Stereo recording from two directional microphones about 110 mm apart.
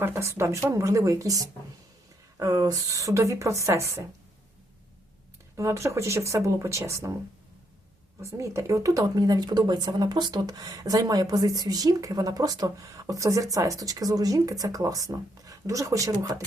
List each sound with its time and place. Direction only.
0.0 s speech: 25° right (ahead or behind)
5.5 s speech: 25° right (ahead or behind)
8.2 s speech: 25° right (ahead or behind)